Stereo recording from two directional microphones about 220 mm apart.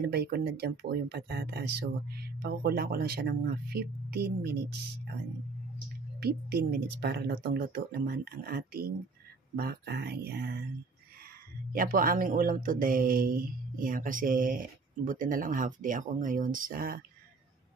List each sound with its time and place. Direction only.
0.1 s speech: 45° right (ahead or behind)
6.1 s speech: 45° right (ahead or behind)
11.7 s speech: 40° right (ahead or behind)